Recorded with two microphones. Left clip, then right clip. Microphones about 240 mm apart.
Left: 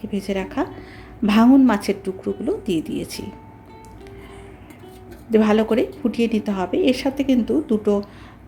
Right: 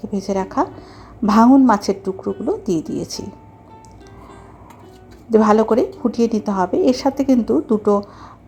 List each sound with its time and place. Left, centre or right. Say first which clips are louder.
0.0 s a woman's voice: right 4 dB; centre
5.3 s a woman's voice: right 4 dB; centre